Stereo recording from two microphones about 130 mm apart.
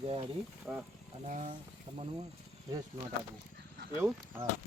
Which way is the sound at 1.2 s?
75° right (ahead or behind).